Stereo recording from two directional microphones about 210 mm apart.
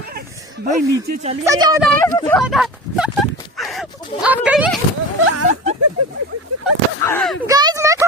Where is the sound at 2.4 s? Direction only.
Centre (ahead or behind).